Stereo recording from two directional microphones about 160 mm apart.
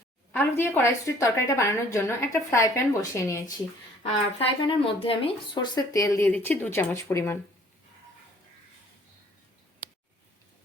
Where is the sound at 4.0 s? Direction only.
35° left (ahead or behind); by 7.4 s 15° left (ahead or behind).